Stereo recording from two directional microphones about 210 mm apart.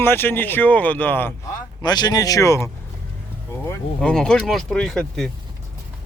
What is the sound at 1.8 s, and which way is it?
Speech, 20° left (ahead or behind).